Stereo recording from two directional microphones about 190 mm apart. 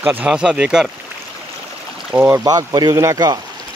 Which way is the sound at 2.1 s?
10° right (ahead or behind).